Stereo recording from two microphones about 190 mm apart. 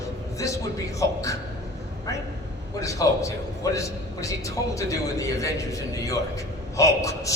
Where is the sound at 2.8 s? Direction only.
15° left (ahead or behind).